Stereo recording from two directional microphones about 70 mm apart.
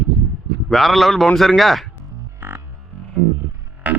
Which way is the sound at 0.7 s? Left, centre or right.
Centre.